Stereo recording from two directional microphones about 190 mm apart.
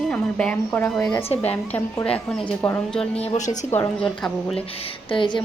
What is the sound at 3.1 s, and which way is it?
Speech, 30° left (ahead or behind).